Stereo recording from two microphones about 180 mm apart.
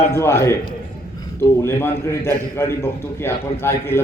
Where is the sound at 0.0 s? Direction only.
15° left (ahead or behind).